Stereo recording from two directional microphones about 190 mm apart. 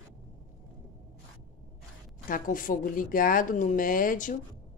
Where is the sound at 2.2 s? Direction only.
45° left (ahead or behind).